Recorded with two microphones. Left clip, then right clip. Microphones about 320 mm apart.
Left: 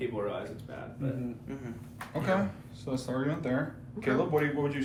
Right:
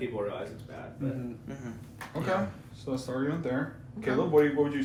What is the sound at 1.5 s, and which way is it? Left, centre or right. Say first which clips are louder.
Speech: left 1 dB; right.